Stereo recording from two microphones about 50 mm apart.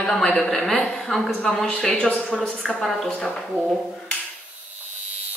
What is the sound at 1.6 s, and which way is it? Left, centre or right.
A woman's voice, centre.